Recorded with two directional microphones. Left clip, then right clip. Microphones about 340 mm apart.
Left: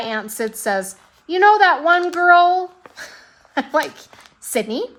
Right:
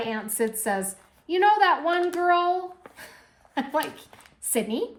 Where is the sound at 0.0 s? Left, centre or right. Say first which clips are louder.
Left 4 dB; centre.